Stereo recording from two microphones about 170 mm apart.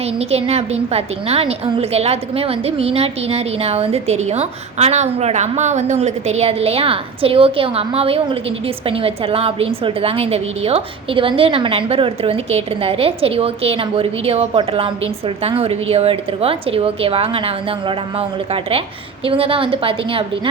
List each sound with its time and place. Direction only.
0.2 s a woman's voice: 35° right (ahead or behind)